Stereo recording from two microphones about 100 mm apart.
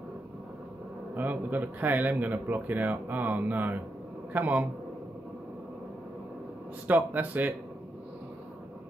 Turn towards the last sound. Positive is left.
turn(degrees=-15)  # may be behind; listen again after turning